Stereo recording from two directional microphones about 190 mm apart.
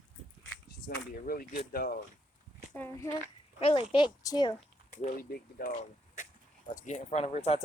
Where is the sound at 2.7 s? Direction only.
15° left (ahead or behind).